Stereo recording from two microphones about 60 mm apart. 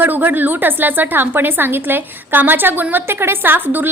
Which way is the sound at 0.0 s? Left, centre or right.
Right.